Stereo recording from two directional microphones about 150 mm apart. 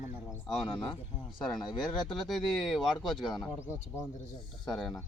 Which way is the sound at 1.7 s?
30° left (ahead or behind).